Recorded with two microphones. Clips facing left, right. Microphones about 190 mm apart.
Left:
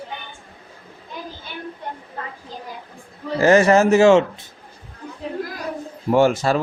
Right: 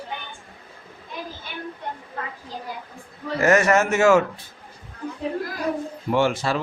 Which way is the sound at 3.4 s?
30° left (ahead or behind).